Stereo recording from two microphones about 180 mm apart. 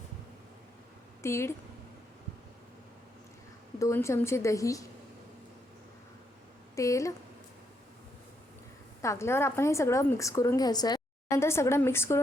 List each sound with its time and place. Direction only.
1.2 s a woman's voice: 15° left (ahead or behind)
3.8 s a woman's voice: 15° left (ahead or behind)
6.7 s a woman's voice: 15° left (ahead or behind)
9.0 s a woman's voice: 15° left (ahead or behind)